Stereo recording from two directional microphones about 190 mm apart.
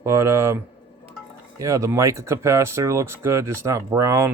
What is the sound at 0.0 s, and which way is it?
Speech, 15° right (ahead or behind).